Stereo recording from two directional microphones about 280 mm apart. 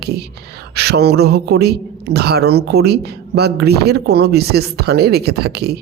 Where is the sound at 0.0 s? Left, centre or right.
Right.